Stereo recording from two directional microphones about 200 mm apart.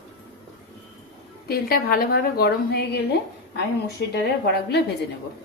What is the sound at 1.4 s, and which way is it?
A woman's voice, 45° left (ahead or behind).